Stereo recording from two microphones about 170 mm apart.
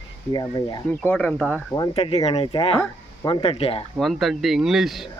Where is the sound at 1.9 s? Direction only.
35° left (ahead or behind).